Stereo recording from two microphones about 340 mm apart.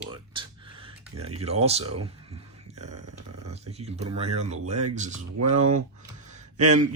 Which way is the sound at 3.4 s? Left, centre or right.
Centre.